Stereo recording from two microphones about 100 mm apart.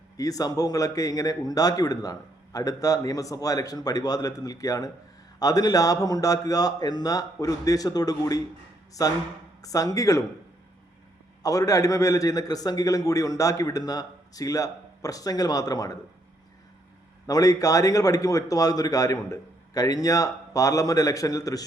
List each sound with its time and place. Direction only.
0.2 s a man's voice: 35° left (ahead or behind)
11.4 s a man's voice: 35° left (ahead or behind)
17.2 s a man's voice: 35° left (ahead or behind)